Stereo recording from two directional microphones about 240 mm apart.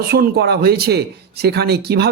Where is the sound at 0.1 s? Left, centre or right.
Right.